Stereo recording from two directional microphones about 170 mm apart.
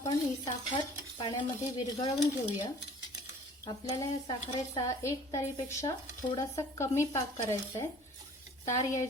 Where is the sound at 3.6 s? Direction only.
25° left (ahead or behind).